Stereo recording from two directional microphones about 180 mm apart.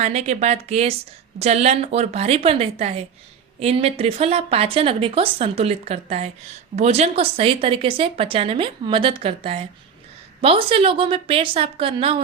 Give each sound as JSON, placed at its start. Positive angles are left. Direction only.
{"t": 0.0, "sound": "a woman's voice", "side_deg": -40}